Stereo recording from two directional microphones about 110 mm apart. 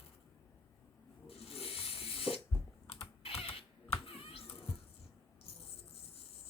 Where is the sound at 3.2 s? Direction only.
60° left (ahead or behind).